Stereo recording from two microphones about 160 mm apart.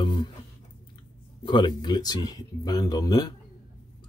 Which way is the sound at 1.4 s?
30° left (ahead or behind).